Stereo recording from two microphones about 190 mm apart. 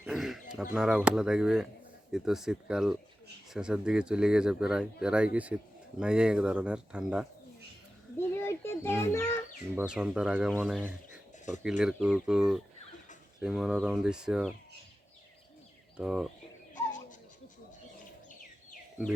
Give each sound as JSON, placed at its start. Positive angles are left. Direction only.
{"t": 0.0, "sound": "bird", "side_deg": 0}
{"t": 0.7, "sound": "speech", "side_deg": -5}
{"t": 8.4, "sound": "a child's voice", "side_deg": 15}
{"t": 9.7, "sound": "speech", "side_deg": -5}
{"t": 16.0, "sound": "speech", "side_deg": -5}
{"t": 16.7, "sound": "insect", "side_deg": 40}